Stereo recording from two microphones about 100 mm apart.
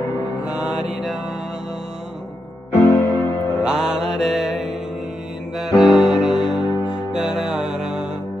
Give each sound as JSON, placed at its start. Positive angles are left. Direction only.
{"t": 0.5, "sound": "mantra", "side_deg": -10}
{"t": 2.7, "sound": "keyboard", "side_deg": 25}
{"t": 3.6, "sound": "music", "side_deg": -5}